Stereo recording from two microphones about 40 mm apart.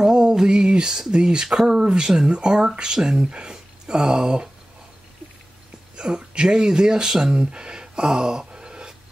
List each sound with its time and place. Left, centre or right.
0.0 s a sound: centre
1.1 s speech: centre
5.9 s speech: right